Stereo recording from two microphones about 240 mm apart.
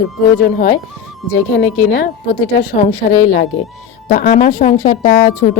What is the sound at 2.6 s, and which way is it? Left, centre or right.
A woman's voice, left.